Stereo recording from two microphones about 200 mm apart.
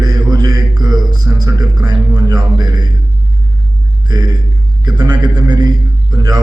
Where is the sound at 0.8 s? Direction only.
20° right (ahead or behind).